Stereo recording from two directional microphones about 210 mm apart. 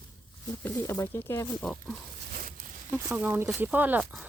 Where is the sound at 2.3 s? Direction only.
40° right (ahead or behind).